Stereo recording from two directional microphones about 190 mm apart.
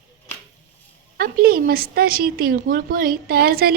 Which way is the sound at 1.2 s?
50° right (ahead or behind).